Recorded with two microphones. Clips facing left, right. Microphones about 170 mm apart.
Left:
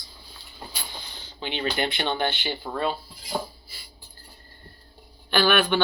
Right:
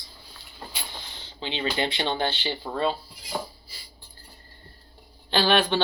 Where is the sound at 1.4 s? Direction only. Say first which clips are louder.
Even; 25° right (ahead or behind).